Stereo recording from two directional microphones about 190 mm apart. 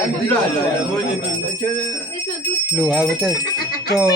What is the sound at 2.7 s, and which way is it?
Speech, 5° right (ahead or behind).